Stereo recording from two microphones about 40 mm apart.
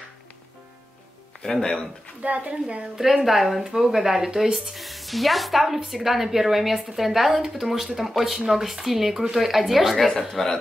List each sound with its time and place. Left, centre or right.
1.4 s speech: centre
2.2 s a woman's voice: right
3.3 s speech: centre